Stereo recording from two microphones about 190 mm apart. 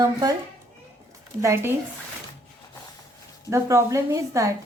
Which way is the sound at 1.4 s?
15° right (ahead or behind).